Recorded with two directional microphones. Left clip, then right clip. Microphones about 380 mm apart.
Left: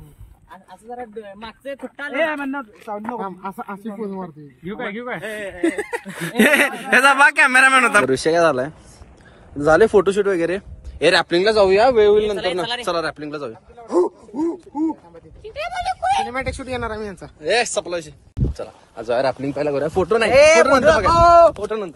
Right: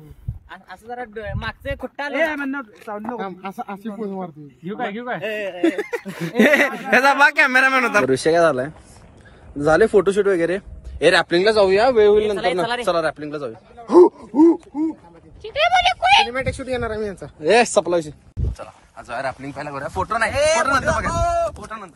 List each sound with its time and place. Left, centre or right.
0.7 s speech: centre
2.1 s a man's voice: centre
4.6 s a man's voice: right
6.2 s a man's voice: centre
13.8 s gasp: centre
15.5 s a sound: centre
16.3 s a man's voice: centre
17.4 s a man's voice: centre